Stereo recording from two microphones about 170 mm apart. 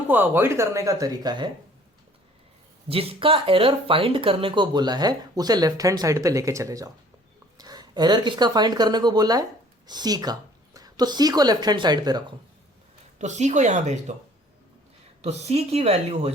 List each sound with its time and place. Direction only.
0.1 s speech: 10° right (ahead or behind)
2.9 s speech: 35° right (ahead or behind)
13.1 s speech: 45° right (ahead or behind)
15.2 s speech: 40° right (ahead or behind)